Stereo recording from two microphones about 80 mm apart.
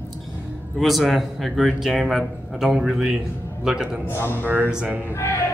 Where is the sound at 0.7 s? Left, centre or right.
Centre.